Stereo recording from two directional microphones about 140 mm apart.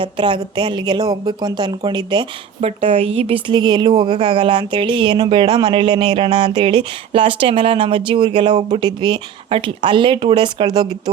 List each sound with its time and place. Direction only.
0.0 s a woman's voice: 35° right (ahead or behind)
2.6 s a woman's voice: 45° right (ahead or behind); by 11.1 s 30° right (ahead or behind)